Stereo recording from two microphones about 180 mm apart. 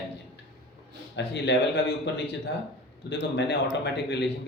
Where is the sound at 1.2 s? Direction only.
75° left (ahead or behind).